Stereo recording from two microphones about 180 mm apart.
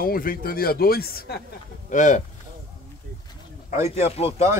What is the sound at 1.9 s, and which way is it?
Speech, 45° left (ahead or behind).